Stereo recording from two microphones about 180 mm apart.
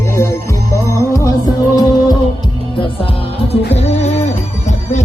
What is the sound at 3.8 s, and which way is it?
Music, 35° left (ahead or behind).